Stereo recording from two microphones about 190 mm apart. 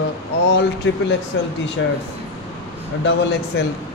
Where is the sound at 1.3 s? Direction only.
70° left (ahead or behind).